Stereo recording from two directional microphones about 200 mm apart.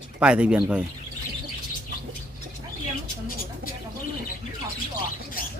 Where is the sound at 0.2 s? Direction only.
5° right (ahead or behind).